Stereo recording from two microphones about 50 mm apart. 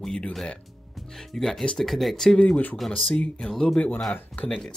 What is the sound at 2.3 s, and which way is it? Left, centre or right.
Speech, left.